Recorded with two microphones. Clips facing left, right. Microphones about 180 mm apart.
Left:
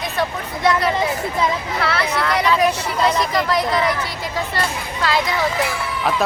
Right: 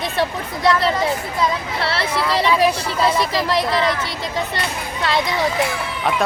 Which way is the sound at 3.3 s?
30° right (ahead or behind).